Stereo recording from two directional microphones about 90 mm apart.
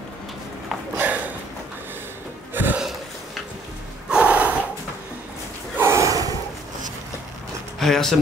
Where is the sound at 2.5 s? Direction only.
20° right (ahead or behind).